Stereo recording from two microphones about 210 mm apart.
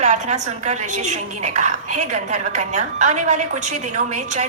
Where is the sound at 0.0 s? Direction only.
35° right (ahead or behind).